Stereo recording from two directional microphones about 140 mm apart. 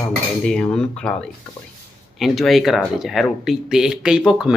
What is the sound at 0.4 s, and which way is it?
Speech, 5° left (ahead or behind).